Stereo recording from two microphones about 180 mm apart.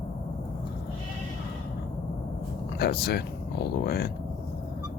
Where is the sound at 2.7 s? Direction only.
60° left (ahead or behind).